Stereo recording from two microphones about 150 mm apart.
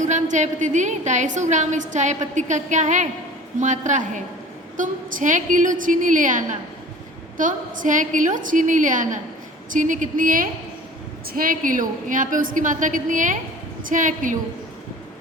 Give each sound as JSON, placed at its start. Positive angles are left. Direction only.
{"t": 0.0, "sound": "a woman's voice", "side_deg": -55}